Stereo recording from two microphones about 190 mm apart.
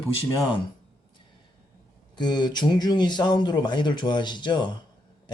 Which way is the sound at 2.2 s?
20° left (ahead or behind).